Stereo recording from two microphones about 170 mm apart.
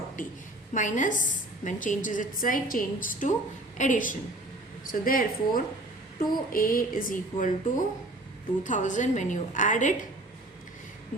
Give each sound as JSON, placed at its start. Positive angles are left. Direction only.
{"t": 0.2, "sound": "a woman's voice", "side_deg": 50}